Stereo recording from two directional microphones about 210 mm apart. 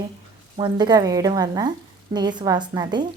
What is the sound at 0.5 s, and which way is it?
A woman's voice, 20° right (ahead or behind).